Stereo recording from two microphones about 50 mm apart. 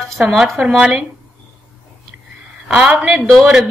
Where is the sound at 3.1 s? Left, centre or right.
Centre.